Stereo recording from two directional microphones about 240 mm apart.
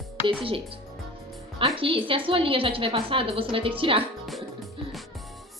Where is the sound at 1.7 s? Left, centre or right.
Right.